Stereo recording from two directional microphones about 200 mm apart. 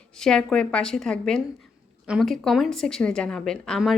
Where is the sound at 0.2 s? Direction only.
5° left (ahead or behind).